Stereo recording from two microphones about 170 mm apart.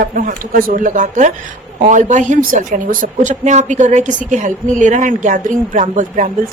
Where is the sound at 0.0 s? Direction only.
50° right (ahead or behind).